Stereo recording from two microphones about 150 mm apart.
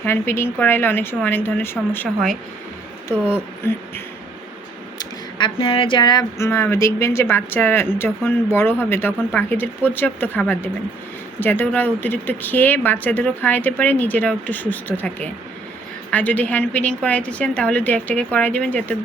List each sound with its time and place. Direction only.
0.0 s speech: 15° left (ahead or behind)
3.1 s speech: 10° right (ahead or behind)
3.6 s speech: 15° left (ahead or behind)
4.9 s speech: 35° left (ahead or behind)
6.4 s speech: 15° left (ahead or behind)